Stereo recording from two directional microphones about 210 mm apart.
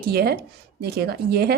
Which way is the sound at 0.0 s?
50° right (ahead or behind).